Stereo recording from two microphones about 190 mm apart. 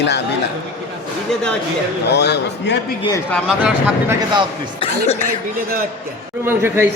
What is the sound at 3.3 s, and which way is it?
Speech, centre (ahead or behind).